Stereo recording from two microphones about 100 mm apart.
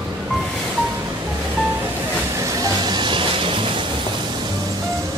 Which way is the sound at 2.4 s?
40° right (ahead or behind).